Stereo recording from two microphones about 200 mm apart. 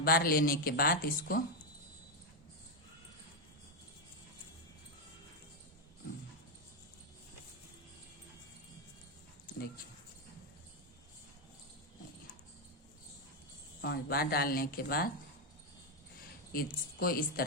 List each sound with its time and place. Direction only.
0.0 s speech: 50° left (ahead or behind)
13.8 s speech: 55° left (ahead or behind)
16.5 s speech: 45° left (ahead or behind)